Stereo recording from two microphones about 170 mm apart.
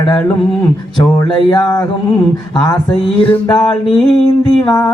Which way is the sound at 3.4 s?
25° left (ahead or behind).